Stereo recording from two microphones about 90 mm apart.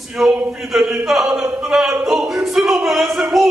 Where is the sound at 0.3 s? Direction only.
15° right (ahead or behind).